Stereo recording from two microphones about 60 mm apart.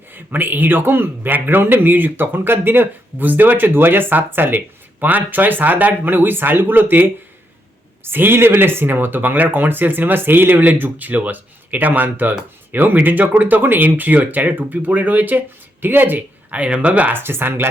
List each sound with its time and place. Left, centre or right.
0.1 s a man's voice: right
17.1 s a man's voice: right